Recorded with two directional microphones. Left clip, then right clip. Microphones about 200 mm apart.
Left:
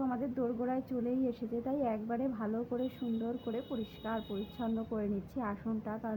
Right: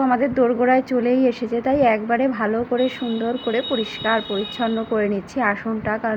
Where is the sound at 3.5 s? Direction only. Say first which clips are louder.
Right 18 dB; 10° right (ahead or behind).